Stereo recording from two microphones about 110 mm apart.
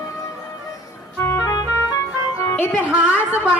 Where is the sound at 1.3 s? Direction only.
30° left (ahead or behind).